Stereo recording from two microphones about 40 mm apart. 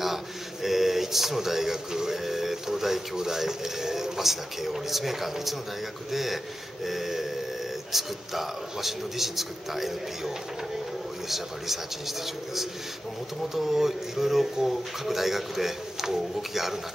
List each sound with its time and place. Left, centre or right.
0.0 s speech: centre
13.6 s speech: centre